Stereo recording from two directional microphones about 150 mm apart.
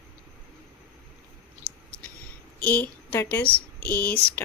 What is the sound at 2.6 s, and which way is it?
Speech, 10° left (ahead or behind).